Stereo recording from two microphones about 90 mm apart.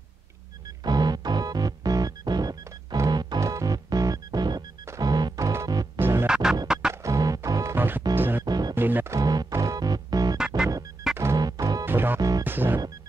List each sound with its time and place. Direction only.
0.8 s music: 50° right (ahead or behind)
3.3 s music: 35° right (ahead or behind)
5.9 s music: 25° right (ahead or behind)
6.2 s music: 10° right (ahead or behind)
6.9 s music: 35° right (ahead or behind)
7.7 s music: 20° right (ahead or behind)
8.5 s music: 50° right (ahead or behind)
8.7 s music: 20° right (ahead or behind)
9.1 s music: 45° right (ahead or behind)
10.3 s music: 5° right (ahead or behind)
11.3 s music: 45° right (ahead or behind)
11.8 s music: 25° right (ahead or behind)
12.2 s music: 45° right (ahead or behind)
12.4 s music: 25° right (ahead or behind)